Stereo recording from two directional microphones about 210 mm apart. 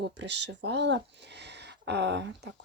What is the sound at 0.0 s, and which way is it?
Speech, 55° right (ahead or behind).